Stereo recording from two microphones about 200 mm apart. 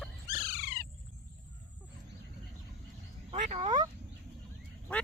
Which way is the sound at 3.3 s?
25° right (ahead or behind).